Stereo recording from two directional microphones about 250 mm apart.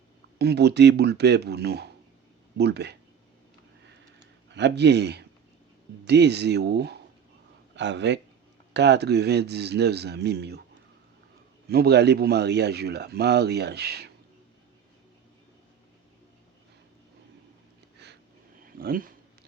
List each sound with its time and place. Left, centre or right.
0.3 s a man's voice: right
4.4 s a man's voice: right
11.7 s a man's voice: right
18.0 s a sound: right
18.8 s speech: right